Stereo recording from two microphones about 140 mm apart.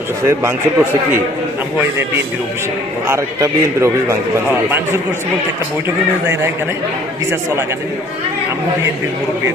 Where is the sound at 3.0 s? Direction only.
20° right (ahead or behind).